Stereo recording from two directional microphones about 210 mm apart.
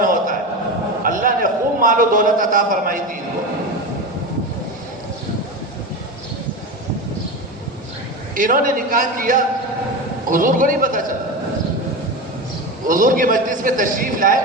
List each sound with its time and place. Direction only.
0.0 s a sound: 40° right (ahead or behind)
1.0 s a man's voice: 40° right (ahead or behind)
8.4 s a man's voice: 40° right (ahead or behind)
12.9 s a man's voice: 40° right (ahead or behind)